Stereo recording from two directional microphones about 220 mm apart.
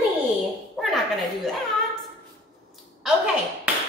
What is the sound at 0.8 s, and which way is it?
Speech, centre (ahead or behind).